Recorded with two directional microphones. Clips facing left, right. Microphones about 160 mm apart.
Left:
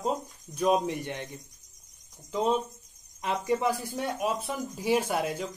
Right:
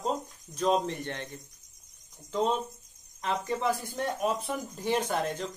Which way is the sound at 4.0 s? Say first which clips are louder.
Even; 5° left (ahead or behind).